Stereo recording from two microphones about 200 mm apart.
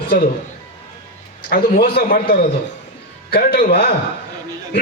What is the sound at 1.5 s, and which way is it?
A man's voice, 50° left (ahead or behind).